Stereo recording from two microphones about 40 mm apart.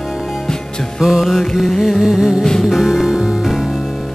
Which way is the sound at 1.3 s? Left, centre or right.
Centre.